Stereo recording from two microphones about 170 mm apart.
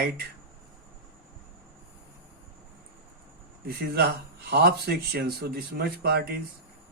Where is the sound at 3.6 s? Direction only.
65° right (ahead or behind).